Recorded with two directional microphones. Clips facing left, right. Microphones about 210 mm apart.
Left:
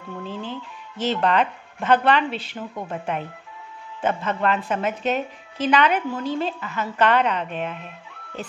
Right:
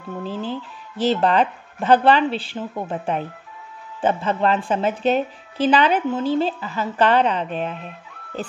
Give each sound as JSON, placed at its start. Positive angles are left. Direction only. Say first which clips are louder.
{"t": 0.2, "sound": "a woman's voice", "louder": "right 5 dB", "side_deg": -35}